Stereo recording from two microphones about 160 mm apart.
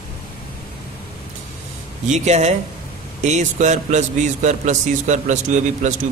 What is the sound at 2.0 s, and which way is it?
A man's voice, 45° right (ahead or behind).